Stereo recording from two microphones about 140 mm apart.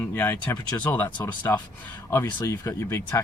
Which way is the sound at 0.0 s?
15° left (ahead or behind).